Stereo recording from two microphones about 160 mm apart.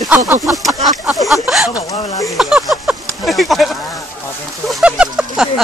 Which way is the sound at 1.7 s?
20° left (ahead or behind).